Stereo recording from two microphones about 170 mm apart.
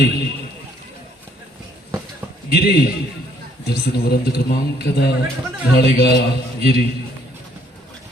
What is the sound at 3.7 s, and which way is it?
A man's voice, 65° left (ahead or behind).